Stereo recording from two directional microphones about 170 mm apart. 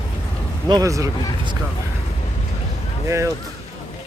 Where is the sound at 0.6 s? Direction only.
20° right (ahead or behind).